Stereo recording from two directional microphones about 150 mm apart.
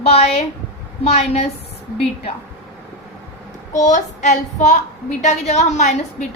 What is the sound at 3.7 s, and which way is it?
Child singing, 55° left (ahead or behind).